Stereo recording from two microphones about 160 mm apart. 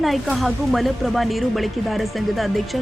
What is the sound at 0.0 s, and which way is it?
Speech, centre (ahead or behind).